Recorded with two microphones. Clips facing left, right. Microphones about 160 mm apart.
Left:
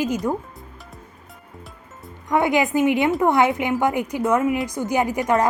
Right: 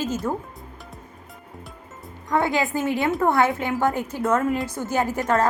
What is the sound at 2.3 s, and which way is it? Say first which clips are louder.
A woman's voice: left 3 dB; 20° left (ahead or behind).